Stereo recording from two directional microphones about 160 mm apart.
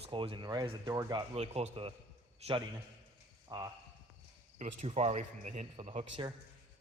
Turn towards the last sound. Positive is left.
turn(degrees=-35)  # may be behind; listen again after turning